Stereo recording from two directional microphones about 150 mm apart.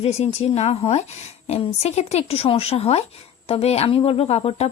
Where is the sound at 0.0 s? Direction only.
45° left (ahead or behind).